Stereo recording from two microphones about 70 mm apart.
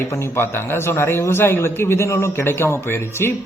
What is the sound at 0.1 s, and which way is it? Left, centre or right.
Speech, left.